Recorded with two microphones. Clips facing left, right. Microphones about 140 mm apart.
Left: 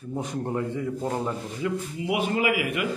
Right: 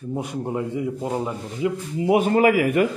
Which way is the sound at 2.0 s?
40° right (ahead or behind).